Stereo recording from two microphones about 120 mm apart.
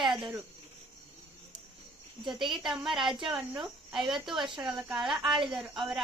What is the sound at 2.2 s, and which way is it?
Speech, 40° right (ahead or behind).